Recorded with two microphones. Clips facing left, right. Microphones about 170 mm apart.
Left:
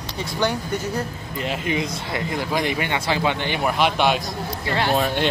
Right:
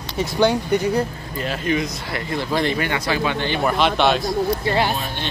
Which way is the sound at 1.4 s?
20° left (ahead or behind).